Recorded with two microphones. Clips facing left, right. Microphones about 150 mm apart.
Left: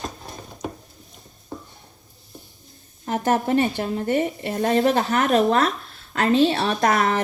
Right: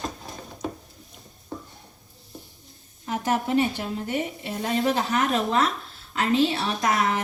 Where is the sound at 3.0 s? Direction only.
55° left (ahead or behind).